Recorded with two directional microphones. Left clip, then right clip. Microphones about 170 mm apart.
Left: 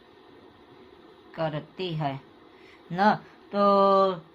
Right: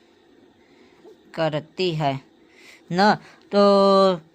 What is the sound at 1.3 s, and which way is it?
Speech, 65° right (ahead or behind).